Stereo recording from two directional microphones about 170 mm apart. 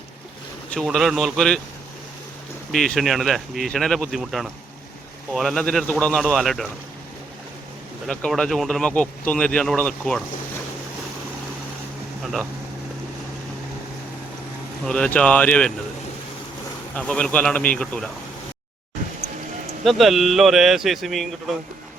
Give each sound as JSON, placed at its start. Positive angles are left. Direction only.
{"t": 0.7, "sound": "speech", "side_deg": 0}
{"t": 2.7, "sound": "speech", "side_deg": 5}
{"t": 8.0, "sound": "speech", "side_deg": 5}
{"t": 12.2, "sound": "speech", "side_deg": 0}
{"t": 14.8, "sound": "speech", "side_deg": 5}
{"t": 16.9, "sound": "speech", "side_deg": 5}
{"t": 19.8, "sound": "speech", "side_deg": 0}